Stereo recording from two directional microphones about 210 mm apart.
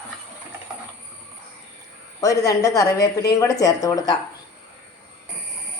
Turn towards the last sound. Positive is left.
turn(degrees=15)  # may be behind; listen again after turning